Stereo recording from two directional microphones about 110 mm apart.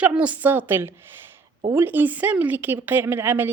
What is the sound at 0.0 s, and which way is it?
A woman's voice, 15° right (ahead or behind).